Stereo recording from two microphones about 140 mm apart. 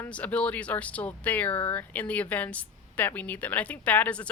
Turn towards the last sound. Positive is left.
turn(degrees=10)  # may be behind; listen again after turning